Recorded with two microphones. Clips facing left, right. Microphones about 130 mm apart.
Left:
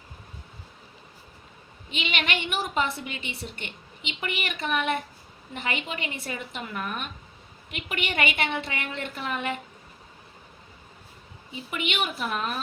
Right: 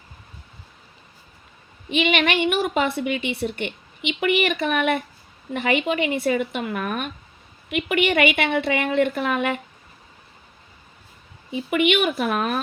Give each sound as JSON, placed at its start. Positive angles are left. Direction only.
{"t": 1.9, "sound": "a woman's voice", "side_deg": -60}
{"t": 11.5, "sound": "a woman's voice", "side_deg": -60}